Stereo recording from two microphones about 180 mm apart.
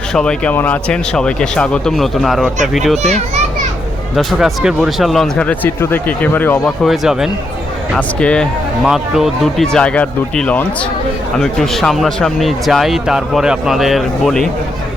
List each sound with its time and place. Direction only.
0.1 s speech: 5° left (ahead or behind)
3.0 s a child's voice: 40° right (ahead or behind)
4.1 s speech: centre (ahead or behind)
6.8 s speech: centre (ahead or behind)